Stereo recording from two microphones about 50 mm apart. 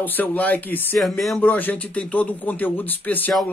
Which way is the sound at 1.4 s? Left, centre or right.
Left.